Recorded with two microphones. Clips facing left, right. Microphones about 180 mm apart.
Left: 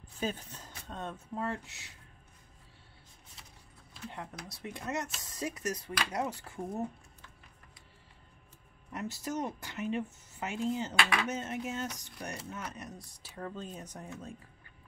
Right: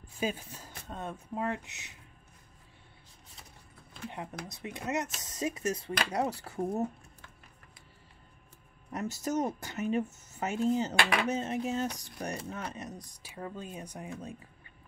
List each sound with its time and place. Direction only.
0.2 s speech: 10° right (ahead or behind)
4.1 s speech: 20° right (ahead or behind); by 6.8 s 35° right (ahead or behind)
8.9 s speech: 40° right (ahead or behind); by 14.3 s 15° right (ahead or behind)